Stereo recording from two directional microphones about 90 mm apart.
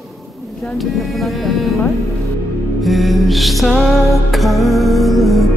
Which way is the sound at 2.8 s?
Centre (ahead or behind).